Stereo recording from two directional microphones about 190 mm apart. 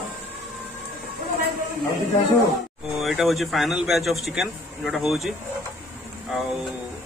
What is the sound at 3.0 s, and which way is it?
A man's voice, centre (ahead or behind).